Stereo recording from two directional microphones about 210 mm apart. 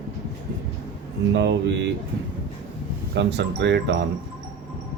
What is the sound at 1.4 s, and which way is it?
Speech, 55° right (ahead or behind).